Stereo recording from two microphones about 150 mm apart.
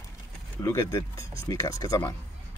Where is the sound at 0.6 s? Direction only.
20° left (ahead or behind).